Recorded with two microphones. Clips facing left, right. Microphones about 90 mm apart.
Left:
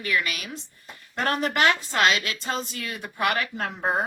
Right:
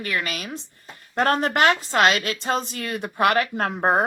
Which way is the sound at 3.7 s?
60° right (ahead or behind).